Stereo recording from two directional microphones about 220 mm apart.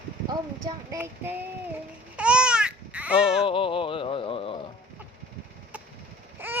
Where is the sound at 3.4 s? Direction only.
25° left (ahead or behind).